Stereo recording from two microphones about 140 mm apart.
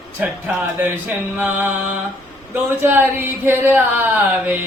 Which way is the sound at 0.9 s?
10° right (ahead or behind).